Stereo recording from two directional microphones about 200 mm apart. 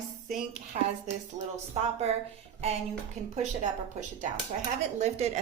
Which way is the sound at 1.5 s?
30° right (ahead or behind).